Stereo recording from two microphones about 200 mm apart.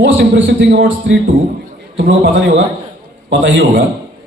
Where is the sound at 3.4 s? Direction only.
65° right (ahead or behind).